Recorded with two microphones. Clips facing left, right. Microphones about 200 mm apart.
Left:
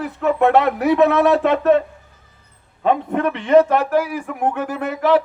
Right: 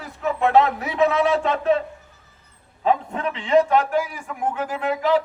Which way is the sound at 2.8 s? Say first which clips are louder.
Left 4 dB; 60° left (ahead or behind).